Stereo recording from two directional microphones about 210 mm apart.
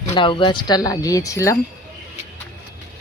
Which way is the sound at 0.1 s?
25° left (ahead or behind).